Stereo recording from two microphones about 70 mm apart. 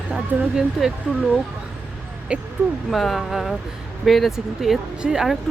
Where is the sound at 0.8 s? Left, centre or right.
Centre.